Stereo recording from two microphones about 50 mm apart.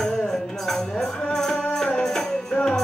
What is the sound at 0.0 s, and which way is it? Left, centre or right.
Music, centre.